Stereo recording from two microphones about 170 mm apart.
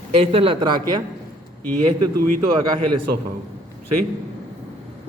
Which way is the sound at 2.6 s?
25° right (ahead or behind).